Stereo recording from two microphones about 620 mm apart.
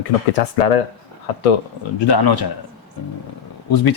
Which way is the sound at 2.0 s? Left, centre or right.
Left.